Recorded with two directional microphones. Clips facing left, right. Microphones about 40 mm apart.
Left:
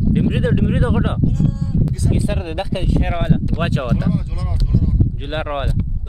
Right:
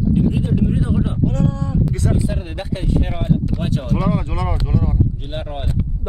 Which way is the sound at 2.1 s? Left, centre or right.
Left.